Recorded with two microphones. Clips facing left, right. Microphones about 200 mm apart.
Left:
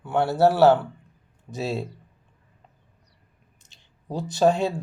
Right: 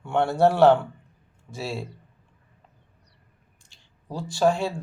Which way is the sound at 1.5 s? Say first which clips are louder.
Left 4 dB; 20° left (ahead or behind).